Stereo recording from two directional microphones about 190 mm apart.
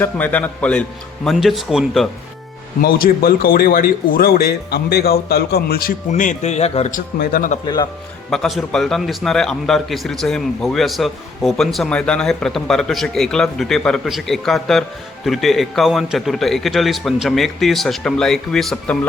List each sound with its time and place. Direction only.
0.0 s a man's voice: 10° left (ahead or behind)
2.8 s speech: 50° left (ahead or behind)
7.6 s speech: 20° left (ahead or behind)
8.3 s a man's voice: centre (ahead or behind)